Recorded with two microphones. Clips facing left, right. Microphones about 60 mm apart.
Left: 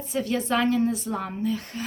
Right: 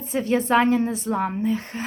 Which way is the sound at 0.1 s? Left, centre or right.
Right.